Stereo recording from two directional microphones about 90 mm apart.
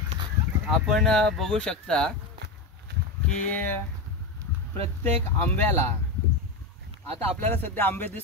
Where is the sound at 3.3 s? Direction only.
20° left (ahead or behind).